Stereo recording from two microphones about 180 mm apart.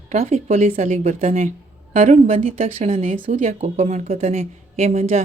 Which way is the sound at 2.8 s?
35° right (ahead or behind).